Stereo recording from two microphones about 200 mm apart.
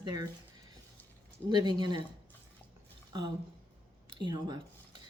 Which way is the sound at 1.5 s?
20° right (ahead or behind).